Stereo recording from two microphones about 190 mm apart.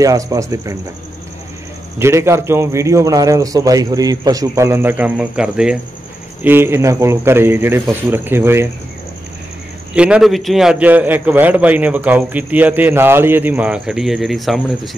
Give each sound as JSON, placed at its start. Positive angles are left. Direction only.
{"t": 0.0, "sound": "a man's voice", "side_deg": -20}
{"t": 2.0, "sound": "a man's voice", "side_deg": -15}
{"t": 9.9, "sound": "a man's voice", "side_deg": -5}